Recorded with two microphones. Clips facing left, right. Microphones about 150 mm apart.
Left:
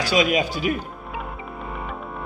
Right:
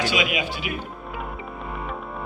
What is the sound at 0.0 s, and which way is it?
Speech, 35° left (ahead or behind).